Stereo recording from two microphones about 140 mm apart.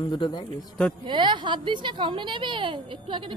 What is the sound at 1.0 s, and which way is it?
A woman's voice, 35° right (ahead or behind).